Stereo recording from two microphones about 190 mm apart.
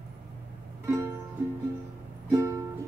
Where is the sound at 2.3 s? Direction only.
15° right (ahead or behind).